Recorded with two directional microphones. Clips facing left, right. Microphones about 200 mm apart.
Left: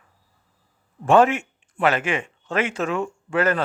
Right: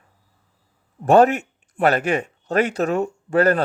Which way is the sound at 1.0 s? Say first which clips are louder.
Right 2 dB; 40° right (ahead or behind).